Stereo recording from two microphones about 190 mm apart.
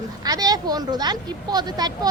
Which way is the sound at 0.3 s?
20° right (ahead or behind).